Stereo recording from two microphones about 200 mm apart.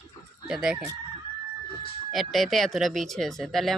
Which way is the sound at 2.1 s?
Centre (ahead or behind).